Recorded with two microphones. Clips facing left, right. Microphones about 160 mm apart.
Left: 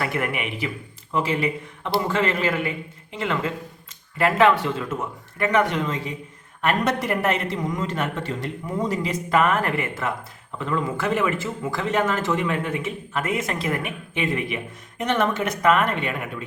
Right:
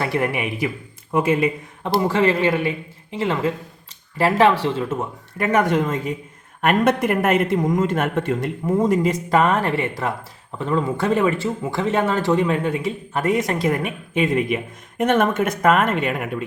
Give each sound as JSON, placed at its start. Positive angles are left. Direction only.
{"t": 0.0, "sound": "a man's voice", "side_deg": -35}
{"t": 1.8, "sound": "speech", "side_deg": -35}
{"t": 4.2, "sound": "a man's voice", "side_deg": -30}
{"t": 5.5, "sound": "a man's voice", "side_deg": -45}
{"t": 9.4, "sound": "a man's voice", "side_deg": -30}